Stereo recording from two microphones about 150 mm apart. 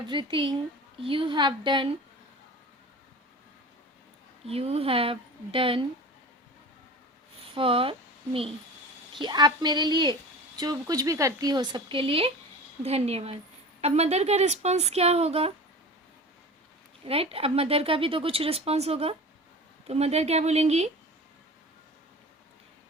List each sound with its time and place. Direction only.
0.0 s speech: 30° right (ahead or behind)
4.4 s speech: 40° right (ahead or behind)
7.5 s speech: 35° right (ahead or behind)
17.1 s speech: 40° right (ahead or behind)